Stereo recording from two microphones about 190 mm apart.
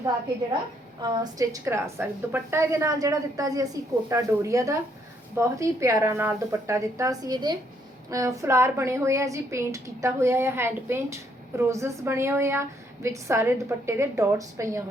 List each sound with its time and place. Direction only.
1.0 s a woman's voice: 20° right (ahead or behind)